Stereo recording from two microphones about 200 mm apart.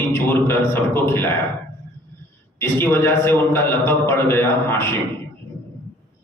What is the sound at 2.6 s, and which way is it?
A man's voice, 10° left (ahead or behind).